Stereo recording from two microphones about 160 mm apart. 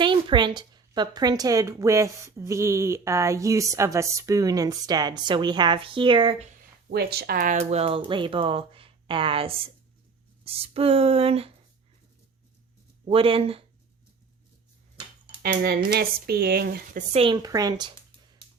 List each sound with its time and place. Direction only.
0.0 s a woman's voice: 30° right (ahead or behind)
6.9 s speech: 85° right
7.5 s speech: 40° right (ahead or behind)
13.1 s speech: 35° right (ahead or behind)
15.4 s speech: 85° right
17.1 s speech: 35° right (ahead or behind)
17.3 s a woman's voice: 20° right (ahead or behind)